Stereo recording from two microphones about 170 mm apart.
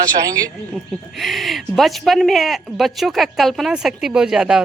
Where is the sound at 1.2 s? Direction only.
Centre (ahead or behind).